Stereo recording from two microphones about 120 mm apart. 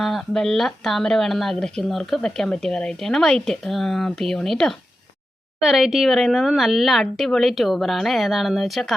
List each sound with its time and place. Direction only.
0.0 s speech: centre (ahead or behind)